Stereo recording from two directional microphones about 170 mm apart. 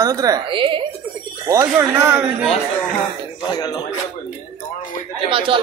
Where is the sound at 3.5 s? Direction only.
25° left (ahead or behind).